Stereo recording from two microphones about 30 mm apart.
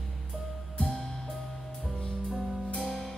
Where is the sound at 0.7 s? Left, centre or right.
Left.